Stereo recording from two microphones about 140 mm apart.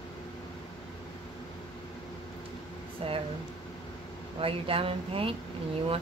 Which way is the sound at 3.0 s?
40° right (ahead or behind).